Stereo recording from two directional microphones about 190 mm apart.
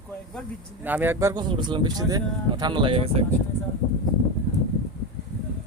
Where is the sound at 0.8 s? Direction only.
10° right (ahead or behind); by 3.2 s 30° right (ahead or behind).